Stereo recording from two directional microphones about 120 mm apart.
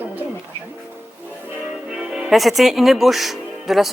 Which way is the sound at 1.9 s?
5° right (ahead or behind).